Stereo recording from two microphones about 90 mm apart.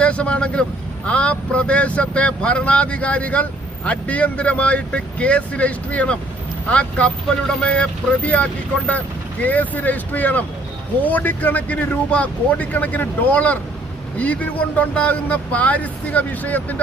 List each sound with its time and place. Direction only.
0.0 s speech: 15° left (ahead or behind)
14.8 s speech: 15° left (ahead or behind)